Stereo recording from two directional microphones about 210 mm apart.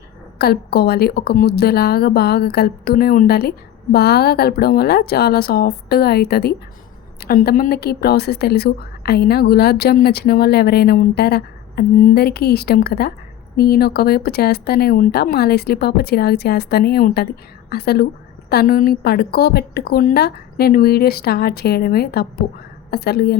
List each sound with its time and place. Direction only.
0.3 s a woman's voice: 50° left (ahead or behind)